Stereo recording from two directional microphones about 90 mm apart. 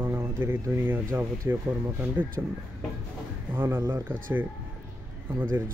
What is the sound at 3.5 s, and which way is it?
Speech, 25° right (ahead or behind).